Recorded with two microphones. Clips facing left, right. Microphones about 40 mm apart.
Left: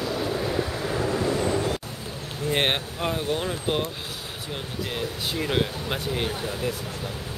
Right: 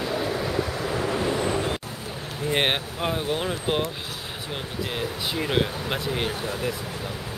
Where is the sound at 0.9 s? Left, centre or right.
Right.